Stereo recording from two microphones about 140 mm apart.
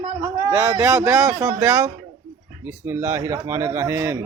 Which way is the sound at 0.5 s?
25° right (ahead or behind).